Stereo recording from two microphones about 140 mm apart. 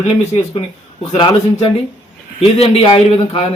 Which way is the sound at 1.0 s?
40° left (ahead or behind).